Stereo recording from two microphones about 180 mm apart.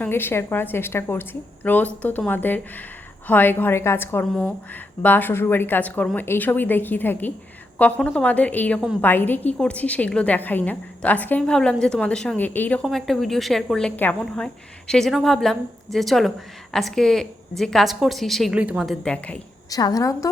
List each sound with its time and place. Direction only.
0.0 s a woman's voice: 10° left (ahead or behind)
19.7 s a woman's voice: 20° left (ahead or behind)